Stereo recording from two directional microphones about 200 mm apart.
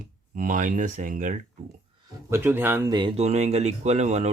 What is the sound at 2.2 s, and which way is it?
Speech, 10° right (ahead or behind).